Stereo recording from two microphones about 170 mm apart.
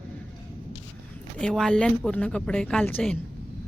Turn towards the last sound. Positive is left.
turn(degrees=10)  # may be behind; listen again after turning